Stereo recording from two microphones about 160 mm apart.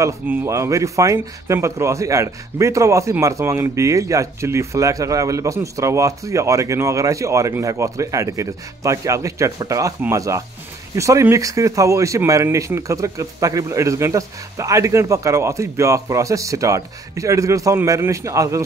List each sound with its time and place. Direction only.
0.0 s speech: 15° right (ahead or behind)